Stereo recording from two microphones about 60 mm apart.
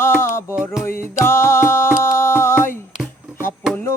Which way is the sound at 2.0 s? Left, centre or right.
Left.